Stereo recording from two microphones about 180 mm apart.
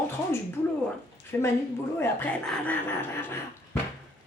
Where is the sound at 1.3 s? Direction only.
15° left (ahead or behind).